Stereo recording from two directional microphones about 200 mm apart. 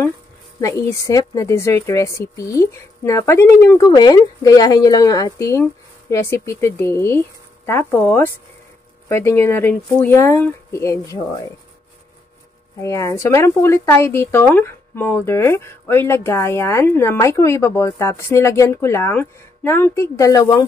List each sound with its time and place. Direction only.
0.6 s speech: 15° left (ahead or behind)
12.8 s speech: 15° left (ahead or behind)